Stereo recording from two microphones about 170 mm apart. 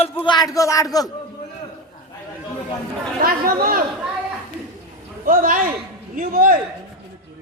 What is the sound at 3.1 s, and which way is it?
Speech, 55° right (ahead or behind).